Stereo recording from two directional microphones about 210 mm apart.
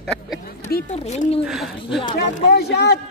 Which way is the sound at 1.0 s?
30° left (ahead or behind).